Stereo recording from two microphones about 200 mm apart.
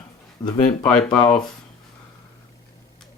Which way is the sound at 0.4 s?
20° left (ahead or behind).